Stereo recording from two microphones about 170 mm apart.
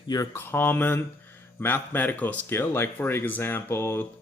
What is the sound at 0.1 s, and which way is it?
Speech, 15° left (ahead or behind).